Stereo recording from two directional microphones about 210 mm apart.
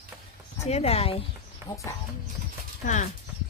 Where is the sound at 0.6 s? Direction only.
30° left (ahead or behind).